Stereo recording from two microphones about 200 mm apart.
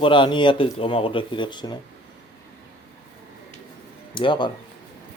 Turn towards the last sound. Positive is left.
turn(degrees=25)  # may be behind; listen again after turning